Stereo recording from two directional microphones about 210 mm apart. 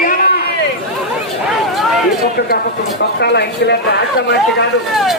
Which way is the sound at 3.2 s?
55° left (ahead or behind).